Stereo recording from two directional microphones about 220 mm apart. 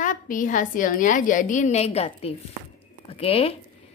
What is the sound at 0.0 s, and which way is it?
A woman's voice, 35° left (ahead or behind).